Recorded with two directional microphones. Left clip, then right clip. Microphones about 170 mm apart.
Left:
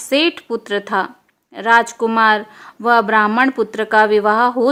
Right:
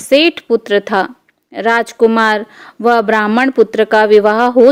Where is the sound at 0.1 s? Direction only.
35° right (ahead or behind).